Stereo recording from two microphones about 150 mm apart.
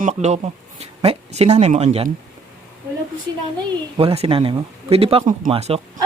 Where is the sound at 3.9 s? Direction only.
40° right (ahead or behind).